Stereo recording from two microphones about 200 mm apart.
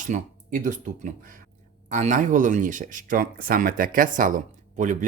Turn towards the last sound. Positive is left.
turn(degrees=-40)  # may be behind; listen again after turning